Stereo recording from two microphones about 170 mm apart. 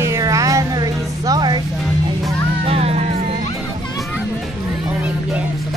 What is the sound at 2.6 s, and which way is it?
Music, 35° right (ahead or behind).